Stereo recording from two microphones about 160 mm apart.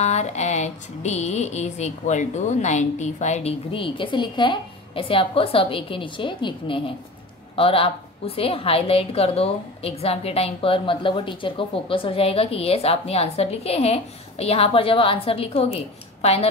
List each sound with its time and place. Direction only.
0.0 s a woman's voice: 45° left (ahead or behind)